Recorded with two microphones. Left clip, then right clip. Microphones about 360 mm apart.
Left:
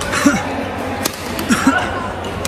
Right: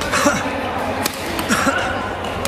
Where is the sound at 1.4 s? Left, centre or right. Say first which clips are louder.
Left 2 dB; centre.